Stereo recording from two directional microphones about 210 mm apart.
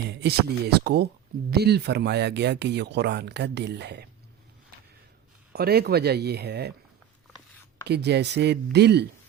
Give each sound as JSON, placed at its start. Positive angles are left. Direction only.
{"t": 0.1, "sound": "speech", "side_deg": -50}
{"t": 5.5, "sound": "speech", "side_deg": -50}
{"t": 7.9, "sound": "speech", "side_deg": -55}